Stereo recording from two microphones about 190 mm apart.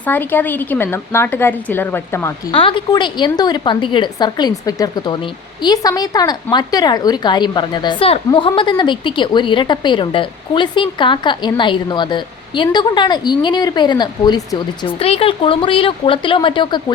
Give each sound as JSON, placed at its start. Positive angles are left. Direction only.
{"t": 0.0, "sound": "speech", "side_deg": 10}
{"t": 2.5, "sound": "a woman's voice", "side_deg": 25}
{"t": 14.9, "sound": "a woman's voice", "side_deg": 30}